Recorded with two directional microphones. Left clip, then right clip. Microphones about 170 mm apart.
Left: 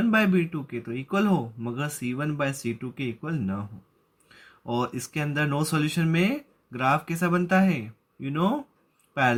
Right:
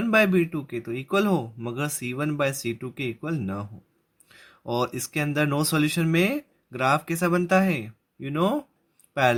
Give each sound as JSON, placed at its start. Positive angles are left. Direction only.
{"t": 0.1, "sound": "speech", "side_deg": -35}